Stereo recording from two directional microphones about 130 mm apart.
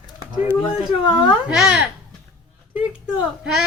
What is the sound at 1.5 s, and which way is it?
Speech, 5° right (ahead or behind).